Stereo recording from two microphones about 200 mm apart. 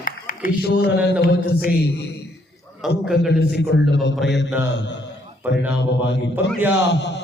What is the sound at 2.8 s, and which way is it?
Speech, centre (ahead or behind).